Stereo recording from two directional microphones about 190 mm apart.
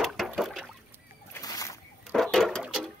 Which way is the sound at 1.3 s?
15° left (ahead or behind).